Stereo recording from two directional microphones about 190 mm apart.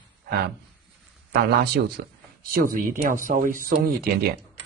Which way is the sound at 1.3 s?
55° right (ahead or behind).